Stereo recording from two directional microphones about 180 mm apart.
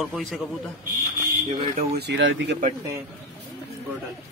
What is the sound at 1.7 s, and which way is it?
Speech, 65° right (ahead or behind).